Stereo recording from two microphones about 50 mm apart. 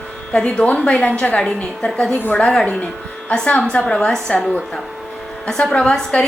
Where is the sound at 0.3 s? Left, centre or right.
Centre.